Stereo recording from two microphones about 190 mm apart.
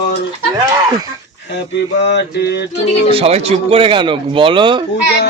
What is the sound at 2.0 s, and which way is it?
Speech, 60° left (ahead or behind).